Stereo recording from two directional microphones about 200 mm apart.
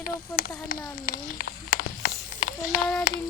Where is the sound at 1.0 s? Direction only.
45° left (ahead or behind).